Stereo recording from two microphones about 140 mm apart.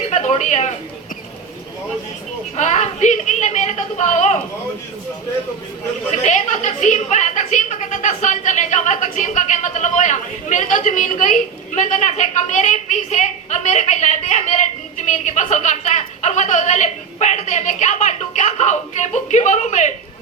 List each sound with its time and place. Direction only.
0.1 s a sound: 55° left (ahead or behind)
2.6 s a woman's voice: 55° left (ahead or behind)
6.1 s a woman's voice: 55° left (ahead or behind)